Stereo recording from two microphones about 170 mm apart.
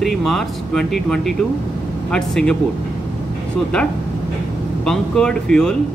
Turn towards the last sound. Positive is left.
turn(degrees=5)  # may be behind; listen again after turning